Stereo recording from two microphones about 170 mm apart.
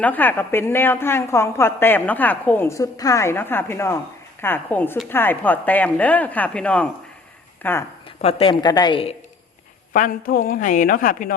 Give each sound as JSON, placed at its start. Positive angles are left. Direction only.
{"t": 0.0, "sound": "a woman's voice", "side_deg": 10}
{"t": 8.0, "sound": "a woman's voice", "side_deg": 35}
{"t": 9.9, "sound": "a woman's voice", "side_deg": 55}